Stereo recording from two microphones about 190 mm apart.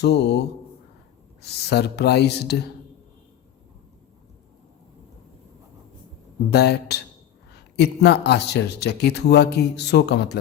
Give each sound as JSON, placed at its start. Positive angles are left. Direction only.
{"t": 0.0, "sound": "speech", "side_deg": 65}
{"t": 6.5, "sound": "speech", "side_deg": 60}